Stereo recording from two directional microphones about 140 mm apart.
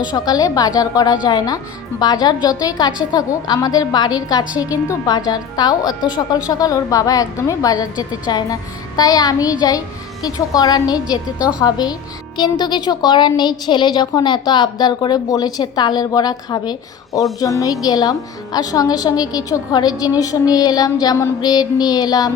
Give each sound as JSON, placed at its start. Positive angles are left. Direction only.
{"t": 0.1, "sound": "a woman's voice", "side_deg": 25}